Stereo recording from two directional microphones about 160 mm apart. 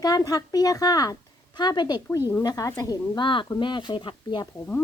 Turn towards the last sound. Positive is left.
turn(degrees=15)  # may be behind; listen again after turning